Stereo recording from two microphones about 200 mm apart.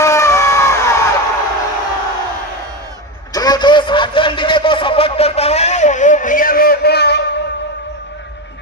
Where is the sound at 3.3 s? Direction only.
20° left (ahead or behind); by 7.2 s 55° left (ahead or behind).